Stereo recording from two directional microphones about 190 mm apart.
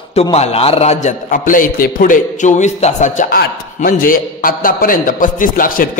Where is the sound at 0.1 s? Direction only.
30° left (ahead or behind).